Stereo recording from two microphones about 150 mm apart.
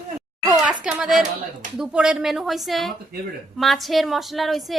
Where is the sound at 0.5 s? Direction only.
5° right (ahead or behind).